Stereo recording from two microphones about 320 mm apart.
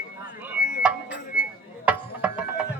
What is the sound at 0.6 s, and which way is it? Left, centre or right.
Music, left.